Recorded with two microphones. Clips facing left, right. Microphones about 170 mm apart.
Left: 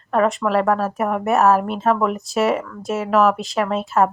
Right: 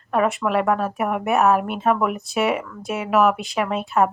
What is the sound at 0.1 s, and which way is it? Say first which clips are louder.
Speech: left 2 dB; centre (ahead or behind).